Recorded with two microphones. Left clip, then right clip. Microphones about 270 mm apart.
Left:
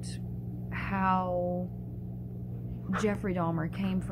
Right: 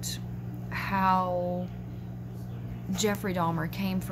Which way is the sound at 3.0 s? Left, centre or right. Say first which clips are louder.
Right 3 dB; centre.